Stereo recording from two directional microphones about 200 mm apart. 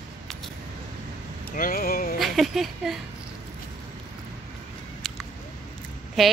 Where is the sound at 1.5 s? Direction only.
45° left (ahead or behind).